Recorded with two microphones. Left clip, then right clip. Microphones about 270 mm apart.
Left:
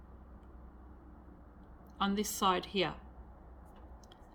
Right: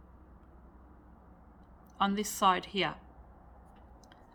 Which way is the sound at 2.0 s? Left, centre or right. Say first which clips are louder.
Right 4 dB; centre.